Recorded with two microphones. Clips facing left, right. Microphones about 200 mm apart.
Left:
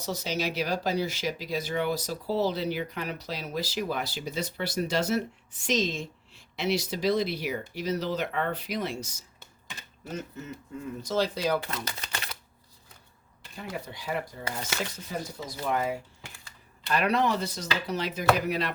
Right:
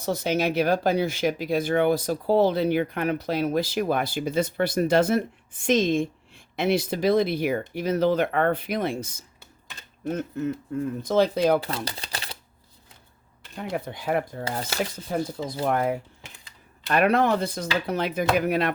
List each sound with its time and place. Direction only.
0.0 s speech: 55° right (ahead or behind)
11.6 s speech: 30° right (ahead or behind)
13.6 s speech: 55° right (ahead or behind)
14.4 s speech: 30° right (ahead or behind)
15.6 s speech: 55° right (ahead or behind)
16.2 s typewriter: 20° right (ahead or behind)
16.9 s speech: 55° right (ahead or behind)
18.3 s chopping: 55° right (ahead or behind)